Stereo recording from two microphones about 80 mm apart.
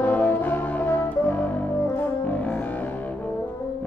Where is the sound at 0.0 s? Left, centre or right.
Left.